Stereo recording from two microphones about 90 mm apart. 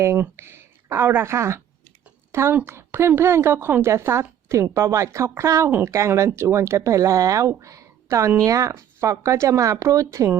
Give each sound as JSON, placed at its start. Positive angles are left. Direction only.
{"t": 0.0, "sound": "speech", "side_deg": -30}